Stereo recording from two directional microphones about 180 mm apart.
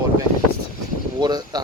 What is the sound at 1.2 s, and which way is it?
Speech, 20° right (ahead or behind).